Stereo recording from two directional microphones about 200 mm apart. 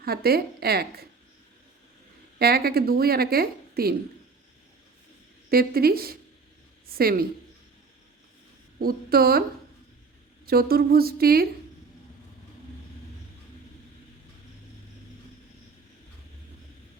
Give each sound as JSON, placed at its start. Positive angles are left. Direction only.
{"t": 0.0, "sound": "a woman's voice", "side_deg": -50}
{"t": 2.4, "sound": "a woman's voice", "side_deg": -50}
{"t": 5.5, "sound": "a woman's voice", "side_deg": -50}
{"t": 8.8, "sound": "a woman's voice", "side_deg": -50}
{"t": 10.4, "sound": "a woman's voice", "side_deg": -50}